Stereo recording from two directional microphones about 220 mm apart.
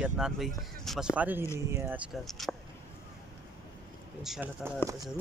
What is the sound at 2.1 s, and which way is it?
Speech, centre (ahead or behind).